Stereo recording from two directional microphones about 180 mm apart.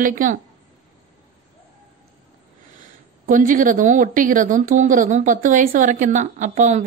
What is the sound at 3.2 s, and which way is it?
A woman's voice, 50° right (ahead or behind).